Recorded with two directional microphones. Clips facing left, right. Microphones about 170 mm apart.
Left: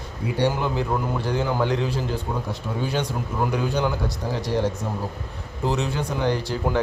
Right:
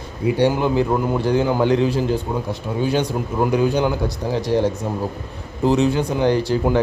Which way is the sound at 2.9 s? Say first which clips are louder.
Right 6 dB; 15° right (ahead or behind).